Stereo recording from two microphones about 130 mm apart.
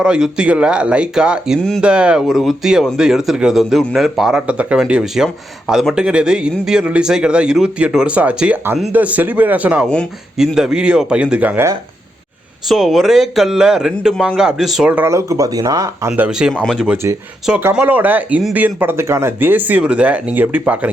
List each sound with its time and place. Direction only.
0.0 s speech: 5° right (ahead or behind)
9.8 s speech: 5° left (ahead or behind)
10.3 s speech: 5° right (ahead or behind)
12.6 s speech: centre (ahead or behind)
15.1 s speech: 25° right (ahead or behind)
16.1 s speech: 10° right (ahead or behind)
16.5 s speech: centre (ahead or behind)